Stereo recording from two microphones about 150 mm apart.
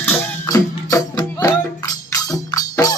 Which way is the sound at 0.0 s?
20° left (ahead or behind).